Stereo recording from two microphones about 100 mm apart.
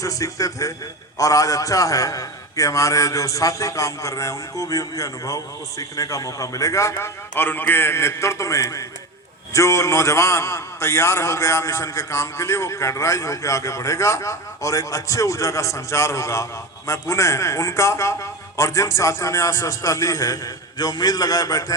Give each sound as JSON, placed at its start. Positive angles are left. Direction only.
{"t": 0.0, "sound": "a man's voice", "side_deg": 35}